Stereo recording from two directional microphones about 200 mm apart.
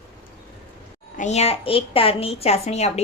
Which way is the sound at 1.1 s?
35° left (ahead or behind).